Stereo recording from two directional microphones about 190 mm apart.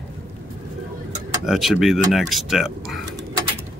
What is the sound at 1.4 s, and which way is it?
Speech, centre (ahead or behind).